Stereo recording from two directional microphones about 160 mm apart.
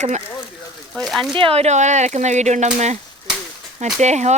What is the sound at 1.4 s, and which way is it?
Speech, 35° right (ahead or behind).